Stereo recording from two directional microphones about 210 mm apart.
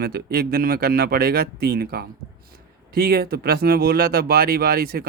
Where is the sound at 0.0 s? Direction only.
50° right (ahead or behind).